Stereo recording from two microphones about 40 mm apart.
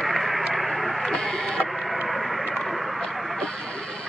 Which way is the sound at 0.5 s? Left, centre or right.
Centre.